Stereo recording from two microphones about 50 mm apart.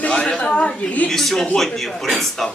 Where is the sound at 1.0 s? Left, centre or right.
Centre.